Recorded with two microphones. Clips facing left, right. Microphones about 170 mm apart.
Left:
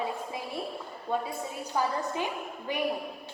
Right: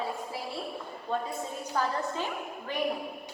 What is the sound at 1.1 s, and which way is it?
A woman's voice, 10° left (ahead or behind).